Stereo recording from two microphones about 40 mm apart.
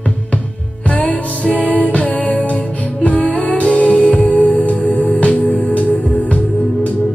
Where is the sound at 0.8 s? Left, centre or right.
Left.